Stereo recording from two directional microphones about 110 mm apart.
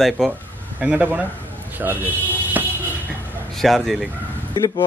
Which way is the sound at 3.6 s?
Centre (ahead or behind).